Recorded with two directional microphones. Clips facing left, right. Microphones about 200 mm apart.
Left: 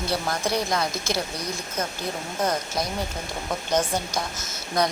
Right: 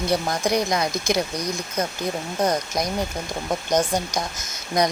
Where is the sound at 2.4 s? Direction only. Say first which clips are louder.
Right 3 dB; 15° right (ahead or behind).